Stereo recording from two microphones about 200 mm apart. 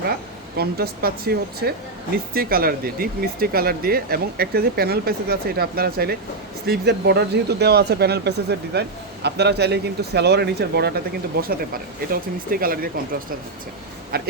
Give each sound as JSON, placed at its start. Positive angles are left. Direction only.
{"t": 0.1, "sound": "speech", "side_deg": -50}
{"t": 14.1, "sound": "speech", "side_deg": -50}